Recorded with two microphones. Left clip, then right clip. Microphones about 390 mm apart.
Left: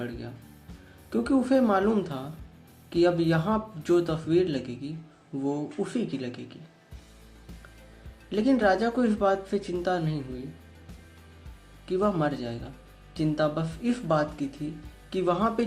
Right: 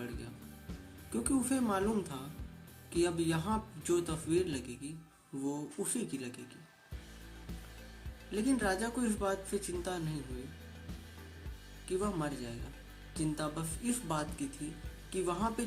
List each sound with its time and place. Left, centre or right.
1.1 s speech: right
8.3 s speech: right
11.9 s speech: right